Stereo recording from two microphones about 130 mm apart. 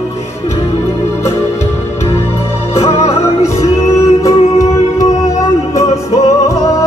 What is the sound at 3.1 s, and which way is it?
Music, 20° left (ahead or behind).